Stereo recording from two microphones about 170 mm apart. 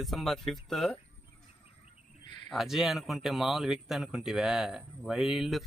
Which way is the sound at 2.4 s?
Centre (ahead or behind).